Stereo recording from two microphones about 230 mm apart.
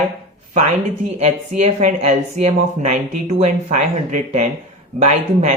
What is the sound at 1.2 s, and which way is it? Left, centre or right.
Speech, right.